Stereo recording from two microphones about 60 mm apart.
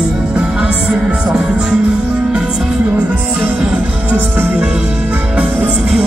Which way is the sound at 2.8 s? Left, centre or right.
Right.